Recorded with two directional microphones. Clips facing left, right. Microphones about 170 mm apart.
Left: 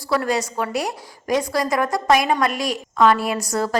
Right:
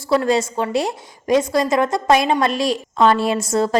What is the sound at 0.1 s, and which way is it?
A woman's voice, 25° right (ahead or behind).